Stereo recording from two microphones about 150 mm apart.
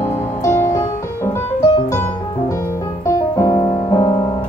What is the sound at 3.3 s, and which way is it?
Music, 25° left (ahead or behind).